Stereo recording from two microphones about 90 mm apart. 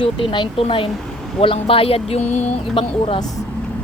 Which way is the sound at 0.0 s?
70° left (ahead or behind).